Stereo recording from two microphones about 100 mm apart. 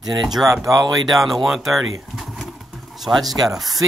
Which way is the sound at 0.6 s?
35° right (ahead or behind).